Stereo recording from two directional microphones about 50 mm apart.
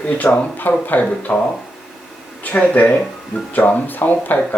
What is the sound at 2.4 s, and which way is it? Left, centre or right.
Speech, left.